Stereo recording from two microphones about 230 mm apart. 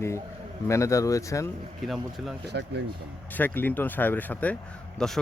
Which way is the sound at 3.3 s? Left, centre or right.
Centre.